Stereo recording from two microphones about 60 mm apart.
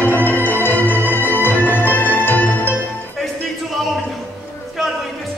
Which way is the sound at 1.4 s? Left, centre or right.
Left.